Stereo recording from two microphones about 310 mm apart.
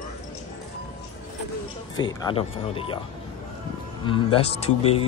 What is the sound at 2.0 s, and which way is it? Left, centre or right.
Speech, centre.